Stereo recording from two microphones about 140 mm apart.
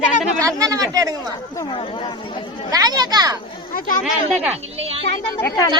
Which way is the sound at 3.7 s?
85° left.